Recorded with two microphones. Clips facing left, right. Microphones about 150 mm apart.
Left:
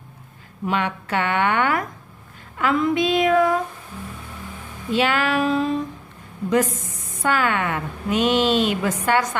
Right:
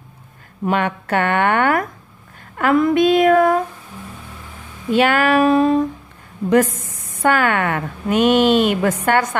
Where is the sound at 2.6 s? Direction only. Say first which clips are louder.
Right 5 dB; 55° right (ahead or behind).